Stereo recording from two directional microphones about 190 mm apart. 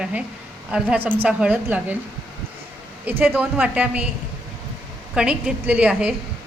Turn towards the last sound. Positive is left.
turn(degrees=-5)  # may be behind; listen again after turning